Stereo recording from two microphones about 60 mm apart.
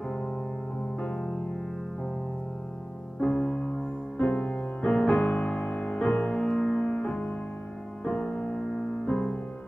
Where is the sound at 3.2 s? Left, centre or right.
Centre.